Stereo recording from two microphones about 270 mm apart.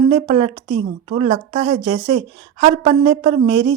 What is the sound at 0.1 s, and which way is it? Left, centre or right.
A woman's voice, centre.